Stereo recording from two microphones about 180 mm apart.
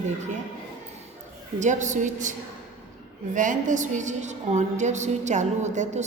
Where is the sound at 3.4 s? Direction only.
45° right (ahead or behind).